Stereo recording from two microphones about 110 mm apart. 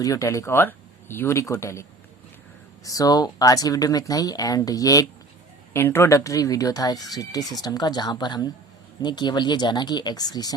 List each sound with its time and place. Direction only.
0.0 s speech: 30° left (ahead or behind)